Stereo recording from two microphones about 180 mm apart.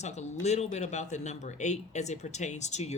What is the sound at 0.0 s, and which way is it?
Speech, 40° left (ahead or behind).